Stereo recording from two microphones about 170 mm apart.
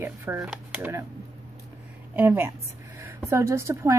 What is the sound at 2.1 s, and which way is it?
Speech, 10° right (ahead or behind).